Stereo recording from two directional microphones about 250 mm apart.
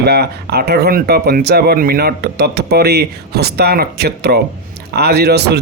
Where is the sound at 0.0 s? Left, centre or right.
Right.